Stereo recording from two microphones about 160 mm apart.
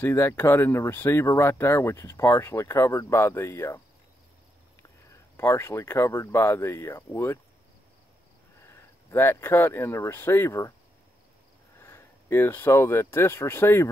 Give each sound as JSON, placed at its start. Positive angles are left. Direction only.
{"t": 0.0, "sound": "speech", "side_deg": 15}
{"t": 5.1, "sound": "speech", "side_deg": 15}
{"t": 8.5, "sound": "speech", "side_deg": 15}
{"t": 11.8, "sound": "speech", "side_deg": 15}